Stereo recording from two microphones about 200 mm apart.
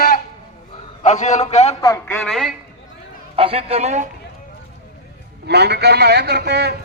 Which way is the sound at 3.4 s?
30° right (ahead or behind).